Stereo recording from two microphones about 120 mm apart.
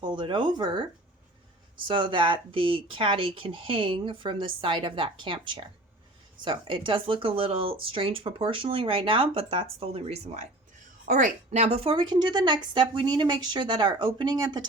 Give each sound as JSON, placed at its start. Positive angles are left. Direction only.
{"t": 0.0, "sound": "speech", "side_deg": -40}
{"t": 1.9, "sound": "speech", "side_deg": -40}
{"t": 11.0, "sound": "speech", "side_deg": -80}